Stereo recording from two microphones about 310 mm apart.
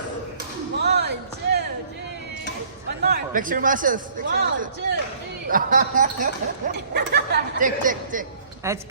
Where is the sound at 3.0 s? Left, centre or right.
Right.